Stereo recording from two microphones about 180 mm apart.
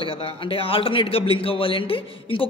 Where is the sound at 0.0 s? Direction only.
30° left (ahead or behind).